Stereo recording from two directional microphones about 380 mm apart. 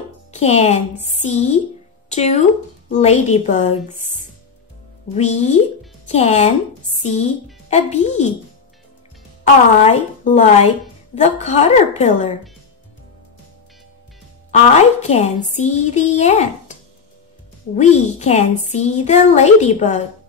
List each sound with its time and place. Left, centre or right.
0.3 s a woman's voice: centre
5.1 s a woman's voice: centre
9.8 s a woman's voice: centre
14.5 s a woman's voice: centre
17.7 s a woman's voice: centre